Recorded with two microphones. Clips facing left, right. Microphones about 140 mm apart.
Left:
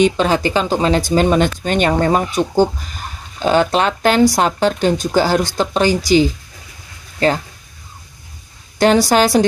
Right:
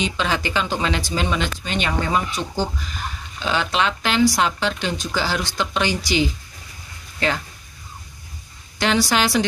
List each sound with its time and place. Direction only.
0.0 s speech: 40° left (ahead or behind)
8.7 s speech: 45° left (ahead or behind)